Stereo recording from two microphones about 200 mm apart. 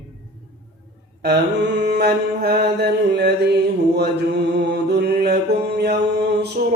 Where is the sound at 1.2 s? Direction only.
55° right (ahead or behind).